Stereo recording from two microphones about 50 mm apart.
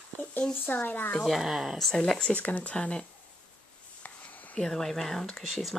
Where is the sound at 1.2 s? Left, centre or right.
Centre.